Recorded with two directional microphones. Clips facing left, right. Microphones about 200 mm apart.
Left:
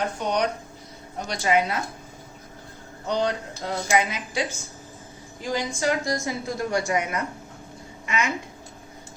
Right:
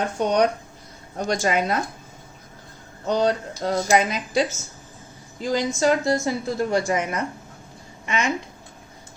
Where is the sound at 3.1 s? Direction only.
40° right (ahead or behind).